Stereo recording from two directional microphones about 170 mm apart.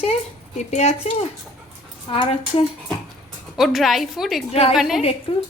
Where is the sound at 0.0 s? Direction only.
40° left (ahead or behind).